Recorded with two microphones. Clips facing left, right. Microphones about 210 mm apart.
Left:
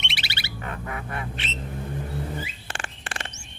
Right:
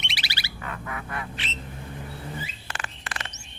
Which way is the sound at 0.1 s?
25° left (ahead or behind).